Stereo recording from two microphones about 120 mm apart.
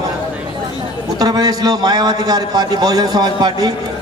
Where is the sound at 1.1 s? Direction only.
35° right (ahead or behind).